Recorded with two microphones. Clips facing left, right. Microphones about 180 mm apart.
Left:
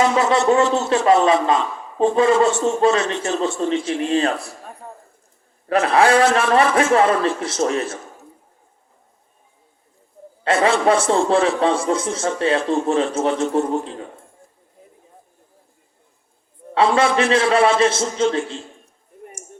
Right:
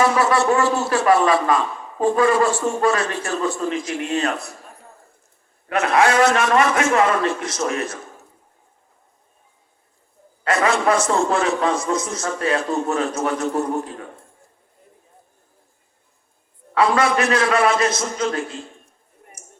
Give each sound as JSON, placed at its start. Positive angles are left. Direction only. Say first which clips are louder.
{"t": 0.0, "sound": "a man's voice", "louder": "left 1 dB", "side_deg": 20}
{"t": 5.6, "sound": "a man's voice", "louder": "left 2 dB", "side_deg": 30}
{"t": 10.4, "sound": "a man's voice", "louder": "left 2 dB", "side_deg": 30}
{"t": 16.7, "sound": "a man's voice", "louder": "left 1 dB", "side_deg": 25}